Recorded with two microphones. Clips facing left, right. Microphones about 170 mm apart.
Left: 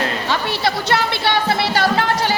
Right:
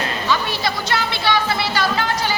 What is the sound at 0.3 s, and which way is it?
Speech, 65° left (ahead or behind).